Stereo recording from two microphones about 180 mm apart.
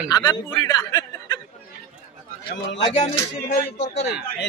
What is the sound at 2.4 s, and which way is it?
Speech, 60° left (ahead or behind).